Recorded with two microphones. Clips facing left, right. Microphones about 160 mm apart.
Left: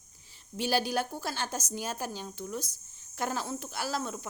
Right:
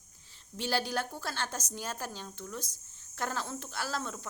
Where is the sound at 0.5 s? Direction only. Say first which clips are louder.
Left 3 dB; 10° left (ahead or behind).